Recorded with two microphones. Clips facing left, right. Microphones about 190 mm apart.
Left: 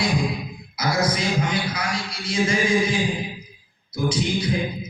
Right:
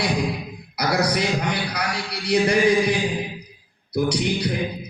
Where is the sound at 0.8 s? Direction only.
65° right (ahead or behind).